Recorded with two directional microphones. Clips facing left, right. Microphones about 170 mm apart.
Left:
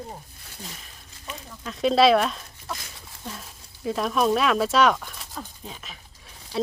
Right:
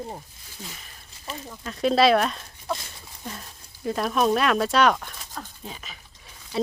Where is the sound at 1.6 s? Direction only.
Centre (ahead or behind).